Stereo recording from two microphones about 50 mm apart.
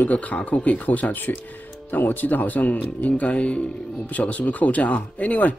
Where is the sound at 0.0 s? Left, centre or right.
Left.